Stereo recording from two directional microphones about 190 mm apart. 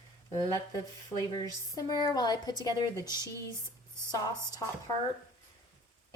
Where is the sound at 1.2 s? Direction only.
20° left (ahead or behind).